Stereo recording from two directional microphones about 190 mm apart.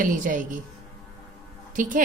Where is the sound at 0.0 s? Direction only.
45° right (ahead or behind).